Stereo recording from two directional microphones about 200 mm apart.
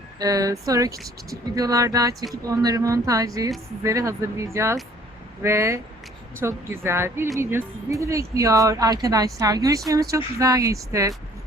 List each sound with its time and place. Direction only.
0.2 s speech: 15° right (ahead or behind)